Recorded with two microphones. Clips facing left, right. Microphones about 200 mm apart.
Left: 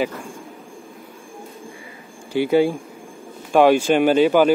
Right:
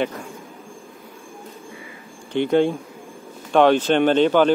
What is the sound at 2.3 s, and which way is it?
Speech, 5° left (ahead or behind).